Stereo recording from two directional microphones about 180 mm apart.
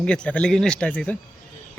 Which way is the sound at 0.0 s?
5° left (ahead or behind).